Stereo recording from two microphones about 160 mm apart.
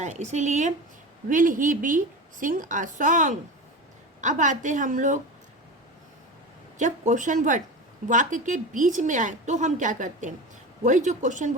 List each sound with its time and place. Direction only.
0.0 s a woman's voice: 45° right (ahead or behind)
6.7 s a woman's voice: 50° right (ahead or behind)